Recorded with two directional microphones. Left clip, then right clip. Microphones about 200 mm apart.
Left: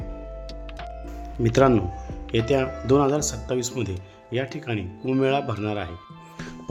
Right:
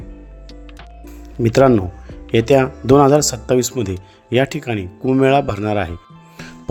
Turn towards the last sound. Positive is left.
turn(degrees=-30)  # may be behind; listen again after turning